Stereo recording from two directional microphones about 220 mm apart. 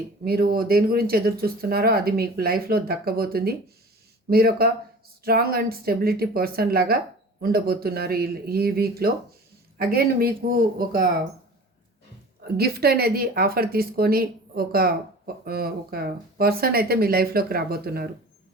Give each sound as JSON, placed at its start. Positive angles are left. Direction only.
{"t": 0.3, "sound": "speech", "side_deg": -45}
{"t": 12.5, "sound": "speech", "side_deg": -45}